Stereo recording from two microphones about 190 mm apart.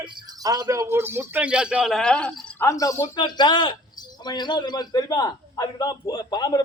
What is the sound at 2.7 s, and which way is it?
A man's voice, 15° left (ahead or behind).